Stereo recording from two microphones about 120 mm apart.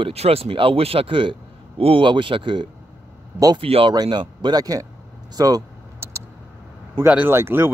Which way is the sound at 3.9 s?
35° right (ahead or behind).